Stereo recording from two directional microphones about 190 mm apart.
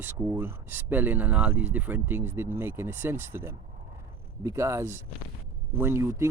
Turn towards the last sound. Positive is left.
turn(degrees=-15)  # may be behind; listen again after turning